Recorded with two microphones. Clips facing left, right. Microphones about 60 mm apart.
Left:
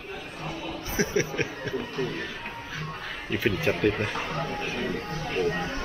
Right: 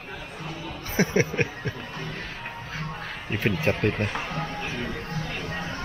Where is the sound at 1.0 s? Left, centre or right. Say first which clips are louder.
Right 3 dB; right.